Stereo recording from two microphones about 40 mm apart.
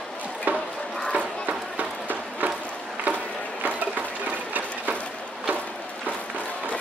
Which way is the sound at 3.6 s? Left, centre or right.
Right.